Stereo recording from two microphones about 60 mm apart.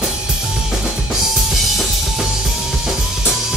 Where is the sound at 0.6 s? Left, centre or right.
Centre.